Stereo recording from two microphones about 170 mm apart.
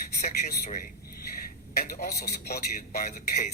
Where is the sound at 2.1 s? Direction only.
70° left (ahead or behind).